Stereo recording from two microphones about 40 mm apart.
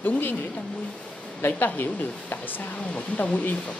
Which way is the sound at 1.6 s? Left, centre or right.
Left.